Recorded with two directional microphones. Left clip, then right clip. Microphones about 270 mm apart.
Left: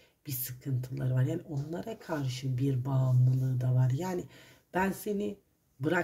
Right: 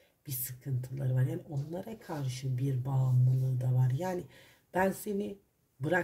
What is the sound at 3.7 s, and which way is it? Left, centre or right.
Speech, centre.